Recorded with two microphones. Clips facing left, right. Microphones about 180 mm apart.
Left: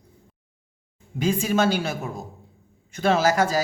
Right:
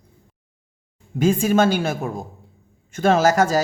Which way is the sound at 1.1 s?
50° right (ahead or behind).